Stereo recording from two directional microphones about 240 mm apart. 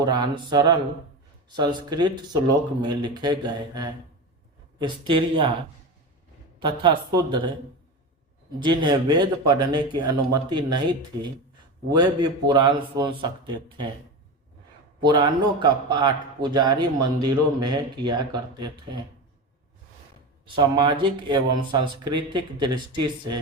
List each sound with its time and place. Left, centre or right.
0.0 s speech: centre
6.6 s speech: centre
8.5 s speech: centre
15.0 s speech: centre
20.6 s speech: right